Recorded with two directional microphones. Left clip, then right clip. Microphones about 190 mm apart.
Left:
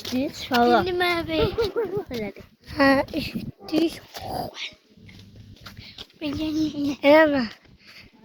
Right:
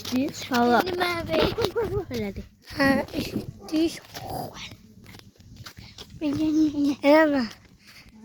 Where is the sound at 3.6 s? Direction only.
Centre (ahead or behind).